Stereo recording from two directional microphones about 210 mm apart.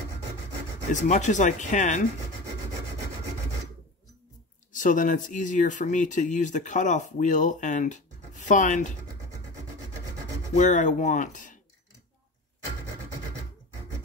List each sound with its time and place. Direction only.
1.0 s speech: 35° left (ahead or behind)
4.7 s speech: 40° left (ahead or behind)
10.5 s speech: 35° left (ahead or behind)